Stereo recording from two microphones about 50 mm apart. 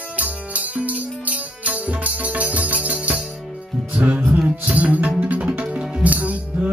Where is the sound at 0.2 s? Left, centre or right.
Right.